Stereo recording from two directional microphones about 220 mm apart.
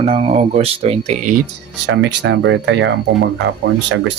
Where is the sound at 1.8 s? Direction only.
55° right (ahead or behind).